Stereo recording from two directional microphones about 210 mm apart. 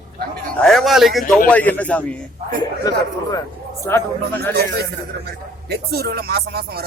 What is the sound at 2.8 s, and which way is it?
A man's voice, 20° left (ahead or behind).